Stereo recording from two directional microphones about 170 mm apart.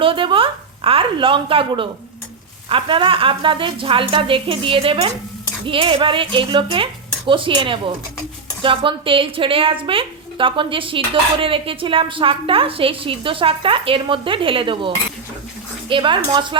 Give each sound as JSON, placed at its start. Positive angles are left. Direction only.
{"t": 0.0, "sound": "a woman's voice", "side_deg": -30}